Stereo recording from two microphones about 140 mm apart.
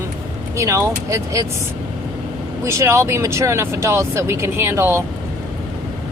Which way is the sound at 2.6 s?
20° right (ahead or behind).